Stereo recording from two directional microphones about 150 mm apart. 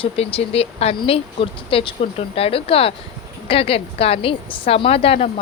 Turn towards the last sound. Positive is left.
turn(degrees=40)  # may be behind; listen again after turning